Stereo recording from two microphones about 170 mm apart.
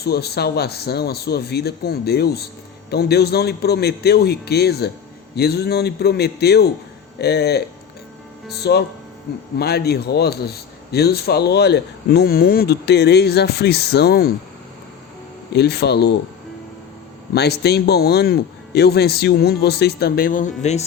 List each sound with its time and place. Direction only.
0.0 s a man's voice: 70° left (ahead or behind)
15.5 s a man's voice: 75° left (ahead or behind)
17.3 s a man's voice: 75° left (ahead or behind); by 20.8 s 40° left (ahead or behind)